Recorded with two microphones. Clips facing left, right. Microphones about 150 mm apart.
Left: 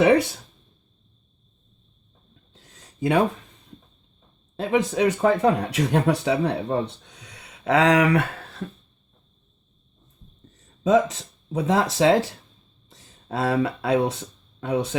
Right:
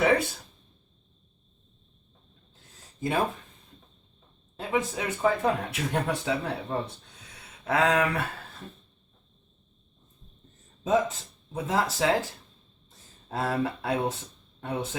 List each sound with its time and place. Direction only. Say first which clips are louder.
3.0 s speech: left 7 dB; 90° left
4.5 s speech: left 7 dB; 90° left
10.8 s speech: left 6 dB; 90° left